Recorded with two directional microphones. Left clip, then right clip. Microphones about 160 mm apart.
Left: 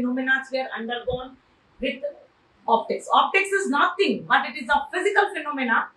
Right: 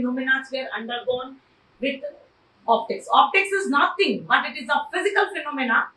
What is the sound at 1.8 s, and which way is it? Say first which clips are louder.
A woman's voice: right 1 dB; 20° left (ahead or behind).